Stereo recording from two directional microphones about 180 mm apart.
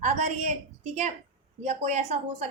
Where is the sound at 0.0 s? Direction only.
40° right (ahead or behind).